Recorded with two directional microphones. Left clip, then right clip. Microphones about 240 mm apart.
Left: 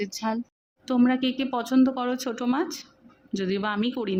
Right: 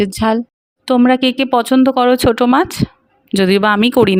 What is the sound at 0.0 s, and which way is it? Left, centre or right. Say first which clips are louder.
Speech: right 14 dB; right.